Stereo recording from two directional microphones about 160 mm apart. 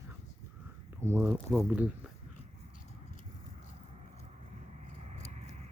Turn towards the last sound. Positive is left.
turn(degrees=-45)  # may be behind; listen again after turning